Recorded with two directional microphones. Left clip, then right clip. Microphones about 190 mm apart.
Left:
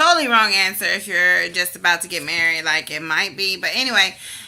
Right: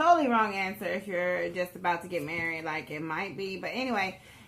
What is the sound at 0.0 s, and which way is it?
A woman's voice, 15° left (ahead or behind).